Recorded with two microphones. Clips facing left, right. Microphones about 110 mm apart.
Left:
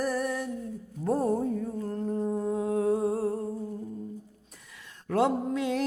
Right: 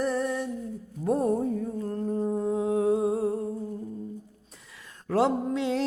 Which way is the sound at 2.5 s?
20° right (ahead or behind).